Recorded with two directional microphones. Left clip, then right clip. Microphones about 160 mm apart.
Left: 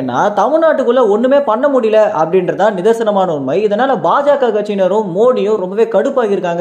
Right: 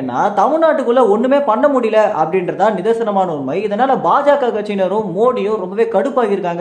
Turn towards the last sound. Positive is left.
turn(degrees=20)  # may be behind; listen again after turning